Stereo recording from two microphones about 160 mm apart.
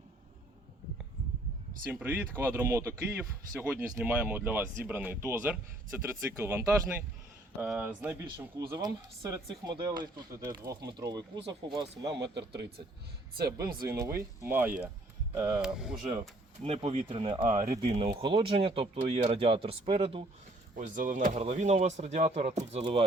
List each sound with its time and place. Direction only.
1.9 s speech: 15° right (ahead or behind)
8.7 s speech: 25° right (ahead or behind)
12.0 s a man's voice: 90° right
13.3 s speech: 75° right (ahead or behind)
14.2 s speech: 15° right (ahead or behind)
15.4 s speech: 25° right (ahead or behind)
15.6 s speech: 5° right (ahead or behind)
16.6 s speech: 35° right (ahead or behind)
20.7 s speech: 55° right (ahead or behind); by 23.0 s 35° right (ahead or behind)